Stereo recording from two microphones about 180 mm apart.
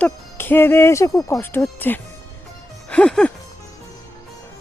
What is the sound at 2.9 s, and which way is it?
Music, 5° left (ahead or behind).